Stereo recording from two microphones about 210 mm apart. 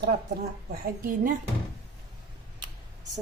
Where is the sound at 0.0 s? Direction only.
45° right (ahead or behind).